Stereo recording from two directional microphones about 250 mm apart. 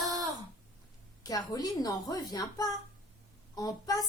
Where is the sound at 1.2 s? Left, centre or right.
Centre.